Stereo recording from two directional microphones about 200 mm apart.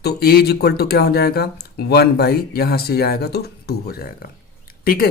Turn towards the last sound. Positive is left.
turn(degrees=50)  # may be behind; listen again after turning